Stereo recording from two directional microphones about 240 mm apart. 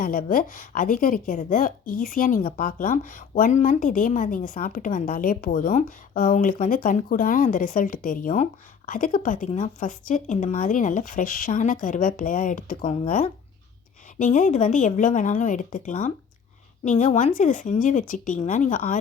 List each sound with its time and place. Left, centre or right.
0.0 s a woman's voice: left